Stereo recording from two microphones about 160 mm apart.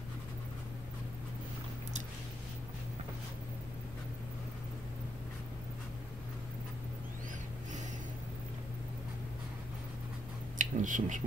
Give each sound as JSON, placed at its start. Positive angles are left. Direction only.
{"t": 10.6, "sound": "speech", "side_deg": -55}